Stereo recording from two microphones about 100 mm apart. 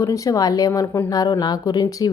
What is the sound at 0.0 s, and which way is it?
Speech, 35° left (ahead or behind).